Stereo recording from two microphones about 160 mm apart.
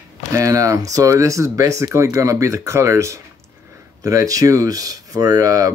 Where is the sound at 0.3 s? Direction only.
20° right (ahead or behind).